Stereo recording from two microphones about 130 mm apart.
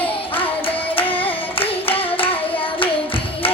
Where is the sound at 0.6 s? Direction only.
45° left (ahead or behind).